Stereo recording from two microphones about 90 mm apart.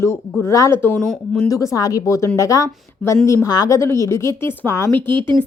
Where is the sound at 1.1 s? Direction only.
5° left (ahead or behind).